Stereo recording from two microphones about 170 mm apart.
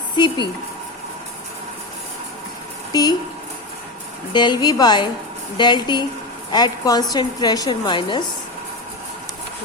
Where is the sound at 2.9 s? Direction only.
25° left (ahead or behind).